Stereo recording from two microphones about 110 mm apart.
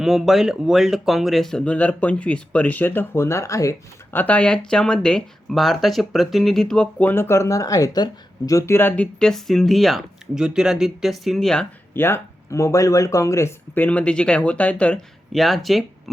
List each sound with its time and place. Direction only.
0.0 s speech: 5° right (ahead or behind); by 4.2 s 30° left (ahead or behind)
4.2 s speech: 10° left (ahead or behind)
7.0 s speech: 20° left (ahead or behind)
9.1 s speech: 5° left (ahead or behind)
11.9 s speech: 20° left (ahead or behind)
13.8 s speech: 10° left (ahead or behind)